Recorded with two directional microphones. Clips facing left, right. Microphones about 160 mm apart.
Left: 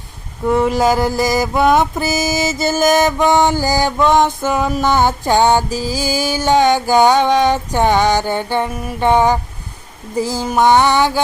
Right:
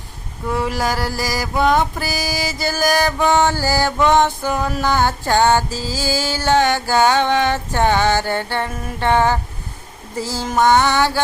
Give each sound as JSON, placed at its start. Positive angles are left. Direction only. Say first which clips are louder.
{"t": 0.5, "sound": "mantra", "louder": "left 7 dB", "side_deg": 20}
{"t": 4.1, "sound": "music", "louder": "left 2 dB", "side_deg": 15}